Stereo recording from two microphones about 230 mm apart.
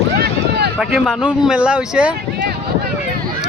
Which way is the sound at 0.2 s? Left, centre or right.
Right.